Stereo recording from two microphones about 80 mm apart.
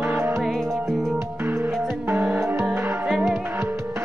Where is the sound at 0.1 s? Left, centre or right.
Right.